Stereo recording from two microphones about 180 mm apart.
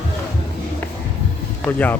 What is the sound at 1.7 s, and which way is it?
Speech, 10° left (ahead or behind).